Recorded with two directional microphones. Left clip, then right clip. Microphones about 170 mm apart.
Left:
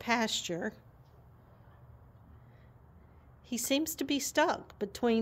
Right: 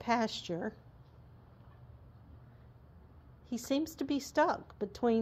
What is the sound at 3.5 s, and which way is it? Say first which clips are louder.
Speech: left 3 dB; 15° left (ahead or behind).